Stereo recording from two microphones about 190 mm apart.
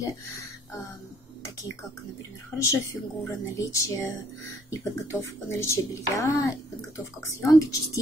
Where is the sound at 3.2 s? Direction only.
15° left (ahead or behind).